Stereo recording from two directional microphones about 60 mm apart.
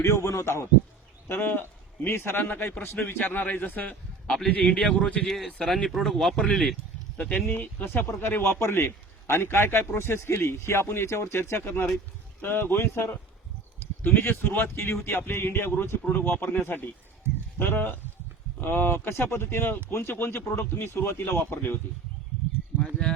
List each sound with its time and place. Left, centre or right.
0.0 s a man's voice: left
1.3 s a man's voice: left; by 6.7 s centre
7.2 s speech: left
7.9 s a man's voice: left
14.2 s a man's voice: left
22.8 s a sound: centre